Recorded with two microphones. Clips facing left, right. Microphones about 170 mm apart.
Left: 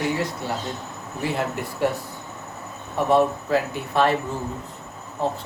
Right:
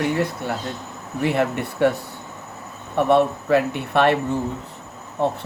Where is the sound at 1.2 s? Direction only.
65° right (ahead or behind).